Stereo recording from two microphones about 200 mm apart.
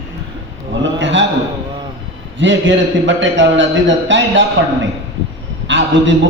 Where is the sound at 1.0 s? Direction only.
65° right (ahead or behind).